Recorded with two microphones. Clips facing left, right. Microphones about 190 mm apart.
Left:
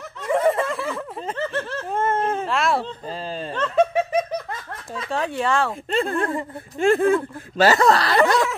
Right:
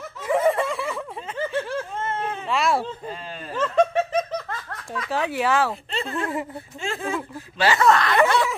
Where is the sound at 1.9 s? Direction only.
50° left (ahead or behind).